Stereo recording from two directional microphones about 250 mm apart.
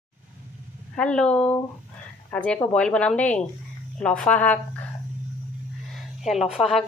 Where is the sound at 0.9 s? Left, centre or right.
Centre.